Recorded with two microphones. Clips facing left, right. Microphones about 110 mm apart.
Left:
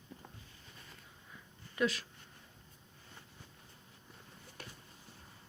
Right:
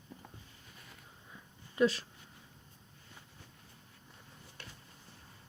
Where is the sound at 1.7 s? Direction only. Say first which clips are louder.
Right 5 dB; 30° right (ahead or behind).